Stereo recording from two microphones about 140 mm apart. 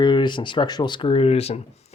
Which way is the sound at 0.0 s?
30° left (ahead or behind).